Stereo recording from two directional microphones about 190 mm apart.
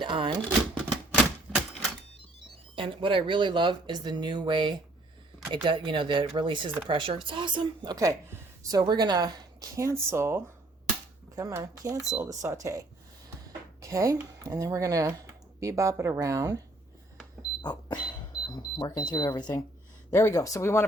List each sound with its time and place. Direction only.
0.0 s a woman's voice: 25° right (ahead or behind)
1.1 s typewriter: centre (ahead or behind)
2.7 s a woman's voice: 25° right (ahead or behind)
13.8 s speech: 15° right (ahead or behind)
17.6 s a sound: 20° left (ahead or behind)
18.4 s speech: 20° left (ahead or behind)